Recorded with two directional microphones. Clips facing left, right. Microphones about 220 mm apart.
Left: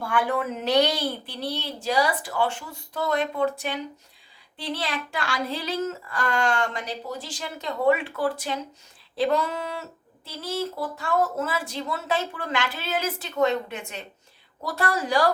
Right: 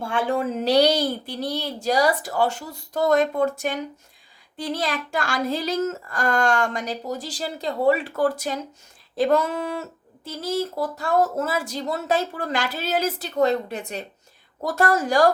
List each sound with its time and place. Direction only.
0.0 s child singing: 25° right (ahead or behind); by 9.8 s 50° right (ahead or behind)
10.2 s speech: 40° right (ahead or behind)
14.6 s child singing: 45° right (ahead or behind)